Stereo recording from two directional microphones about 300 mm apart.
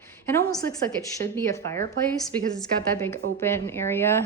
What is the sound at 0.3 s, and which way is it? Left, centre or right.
A woman's voice, centre.